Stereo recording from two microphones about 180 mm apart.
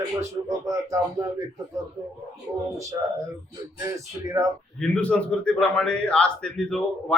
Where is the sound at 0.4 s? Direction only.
20° right (ahead or behind).